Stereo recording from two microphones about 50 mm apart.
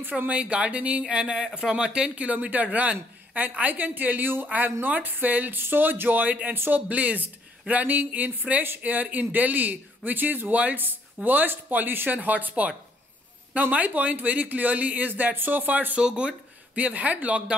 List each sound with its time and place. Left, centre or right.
0.3 s speech: right
16.0 s speech: centre
16.7 s speech: right